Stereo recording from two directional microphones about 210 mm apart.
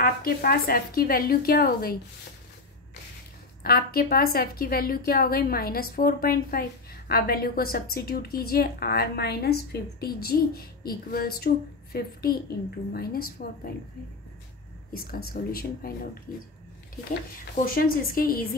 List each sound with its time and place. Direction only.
0.0 s a woman's voice: 45° left (ahead or behind)
3.6 s a woman's voice: 45° left (ahead or behind)
14.9 s a woman's voice: 45° left (ahead or behind)
17.6 s a woman's voice: 45° left (ahead or behind)